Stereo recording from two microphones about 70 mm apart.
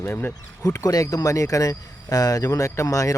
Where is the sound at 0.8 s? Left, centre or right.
Left.